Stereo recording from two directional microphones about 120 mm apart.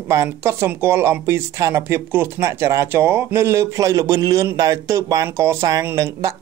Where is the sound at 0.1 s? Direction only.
25° right (ahead or behind).